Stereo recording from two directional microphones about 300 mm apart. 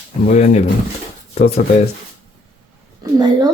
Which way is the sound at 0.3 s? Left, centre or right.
Left.